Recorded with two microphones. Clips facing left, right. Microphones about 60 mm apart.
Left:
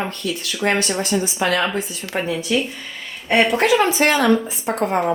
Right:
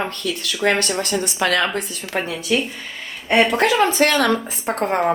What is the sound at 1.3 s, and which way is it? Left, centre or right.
Speech, right.